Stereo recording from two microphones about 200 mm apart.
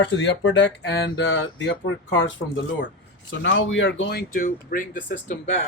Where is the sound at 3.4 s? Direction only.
70° left (ahead or behind).